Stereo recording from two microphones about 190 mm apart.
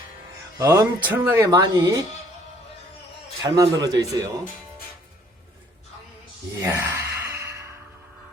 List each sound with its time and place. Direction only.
0.6 s speech: 15° right (ahead or behind)
3.4 s speech: 20° right (ahead or behind)
6.6 s a sound: 10° right (ahead or behind)